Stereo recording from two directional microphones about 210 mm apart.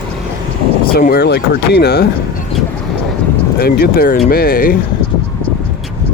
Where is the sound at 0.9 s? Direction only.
50° left (ahead or behind).